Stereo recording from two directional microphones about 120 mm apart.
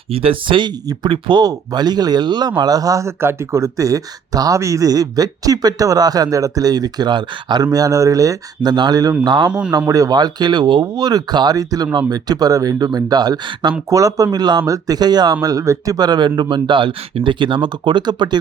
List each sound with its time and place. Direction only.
0.1 s speech: 50° right (ahead or behind); by 9.5 s 35° right (ahead or behind)
9.5 s a man's voice: 10° right (ahead or behind)
9.7 s speech: 30° right (ahead or behind)